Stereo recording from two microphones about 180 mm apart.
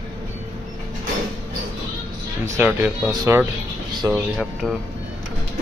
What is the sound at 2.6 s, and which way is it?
Speech, 5° right (ahead or behind).